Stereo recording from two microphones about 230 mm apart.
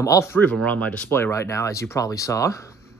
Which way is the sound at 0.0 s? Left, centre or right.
Centre.